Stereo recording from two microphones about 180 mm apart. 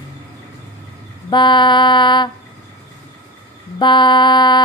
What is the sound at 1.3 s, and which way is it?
Mantra, 25° left (ahead or behind).